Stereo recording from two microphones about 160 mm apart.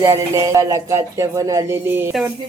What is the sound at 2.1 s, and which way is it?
Speech, 5° right (ahead or behind).